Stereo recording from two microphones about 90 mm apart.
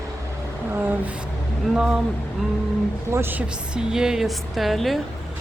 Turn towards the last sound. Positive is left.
turn(degrees=0)  # may be behind; listen again after turning